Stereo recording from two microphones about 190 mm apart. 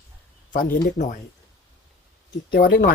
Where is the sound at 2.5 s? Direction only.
50° left (ahead or behind).